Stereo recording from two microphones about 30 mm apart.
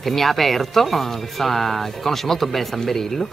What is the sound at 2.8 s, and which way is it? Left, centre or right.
Speech, centre.